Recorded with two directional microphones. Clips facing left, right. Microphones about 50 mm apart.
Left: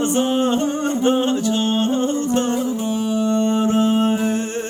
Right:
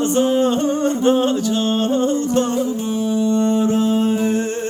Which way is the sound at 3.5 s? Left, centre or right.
Left.